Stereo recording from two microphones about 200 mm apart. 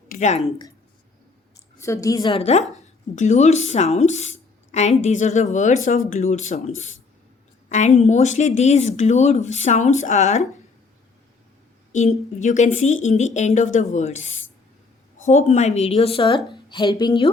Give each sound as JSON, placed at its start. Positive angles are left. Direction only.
{"t": 0.1, "sound": "a sound", "side_deg": 35}
{"t": 1.8, "sound": "a woman's voice", "side_deg": 15}
{"t": 2.4, "sound": "speech", "side_deg": 30}
{"t": 11.9, "sound": "a woman's voice", "side_deg": 35}